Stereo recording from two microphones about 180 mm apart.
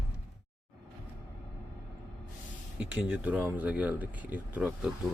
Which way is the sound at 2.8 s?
10° right (ahead or behind).